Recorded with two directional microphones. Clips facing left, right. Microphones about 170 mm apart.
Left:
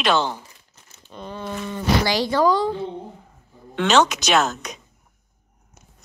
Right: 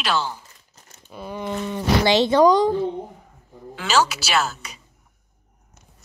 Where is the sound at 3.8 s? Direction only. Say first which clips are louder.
Left 3 dB; 5° right (ahead or behind).